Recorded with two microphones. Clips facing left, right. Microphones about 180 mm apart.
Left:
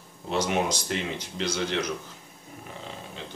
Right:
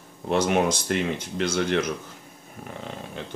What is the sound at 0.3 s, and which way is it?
Speech, 55° right (ahead or behind).